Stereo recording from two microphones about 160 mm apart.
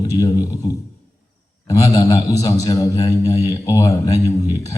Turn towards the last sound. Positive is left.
turn(degrees=20)  # may be behind; listen again after turning